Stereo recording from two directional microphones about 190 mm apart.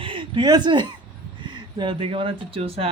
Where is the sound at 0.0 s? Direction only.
25° right (ahead or behind).